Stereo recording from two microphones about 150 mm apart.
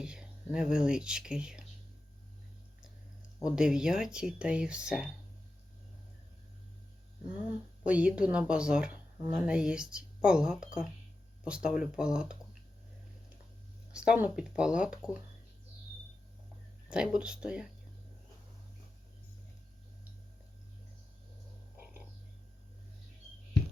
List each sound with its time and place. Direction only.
0.0 s speech: 5° right (ahead or behind)
3.4 s speech: 5° right (ahead or behind)
7.9 s speech: 10° right (ahead or behind)
13.9 s speech: 5° right (ahead or behind)
16.9 s speech: 5° right (ahead or behind)